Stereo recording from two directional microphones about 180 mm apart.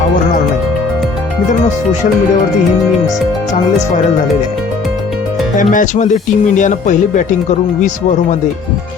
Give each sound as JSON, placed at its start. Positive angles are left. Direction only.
{"t": 5.7, "sound": "speech", "side_deg": 45}